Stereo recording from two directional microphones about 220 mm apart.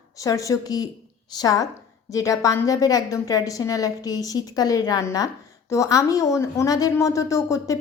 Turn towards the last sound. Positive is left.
turn(degrees=15)  # may be behind; listen again after turning